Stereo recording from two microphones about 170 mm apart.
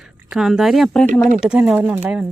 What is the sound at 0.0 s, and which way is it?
Speech, centre (ahead or behind).